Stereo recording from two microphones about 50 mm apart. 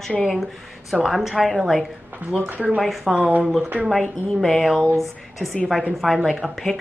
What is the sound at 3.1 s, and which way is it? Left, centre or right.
Speech, right.